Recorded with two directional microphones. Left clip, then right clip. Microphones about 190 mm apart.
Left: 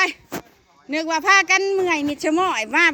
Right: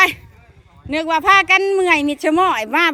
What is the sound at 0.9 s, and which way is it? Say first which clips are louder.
Speech: right 4 dB; centre (ahead or behind).